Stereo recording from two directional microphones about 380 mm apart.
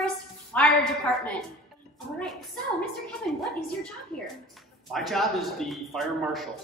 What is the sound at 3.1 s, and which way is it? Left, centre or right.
Speech, centre.